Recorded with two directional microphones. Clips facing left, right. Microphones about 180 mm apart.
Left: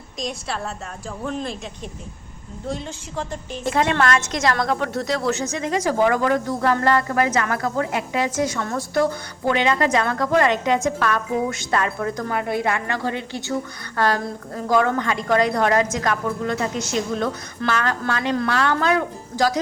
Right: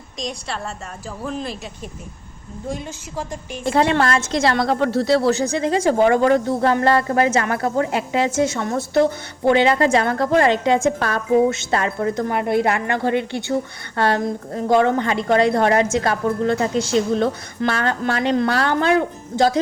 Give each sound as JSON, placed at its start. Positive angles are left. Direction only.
{"t": 0.2, "sound": "a woman's voice", "side_deg": 0}
{"t": 2.6, "sound": "a woman's voice", "side_deg": -10}
{"t": 3.7, "sound": "a woman's voice", "side_deg": -30}